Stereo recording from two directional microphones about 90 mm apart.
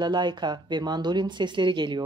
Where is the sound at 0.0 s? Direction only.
55° right (ahead or behind).